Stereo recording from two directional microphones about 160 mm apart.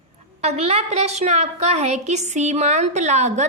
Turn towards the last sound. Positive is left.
turn(degrees=-45)  # may be behind; listen again after turning